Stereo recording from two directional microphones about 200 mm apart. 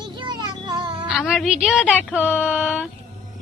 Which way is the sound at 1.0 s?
5° right (ahead or behind).